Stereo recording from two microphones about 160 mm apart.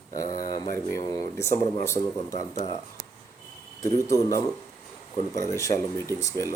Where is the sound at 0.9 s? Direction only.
20° left (ahead or behind).